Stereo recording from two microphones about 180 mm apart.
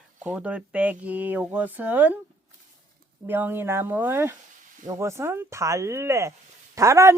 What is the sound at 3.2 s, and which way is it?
Speech, 10° right (ahead or behind).